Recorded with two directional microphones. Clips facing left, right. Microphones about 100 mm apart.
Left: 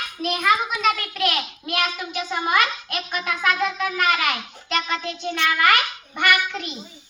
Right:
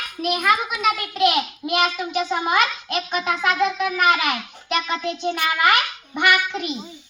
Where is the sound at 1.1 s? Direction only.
20° right (ahead or behind).